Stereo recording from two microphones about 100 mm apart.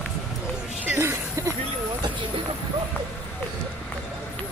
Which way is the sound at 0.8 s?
25° right (ahead or behind).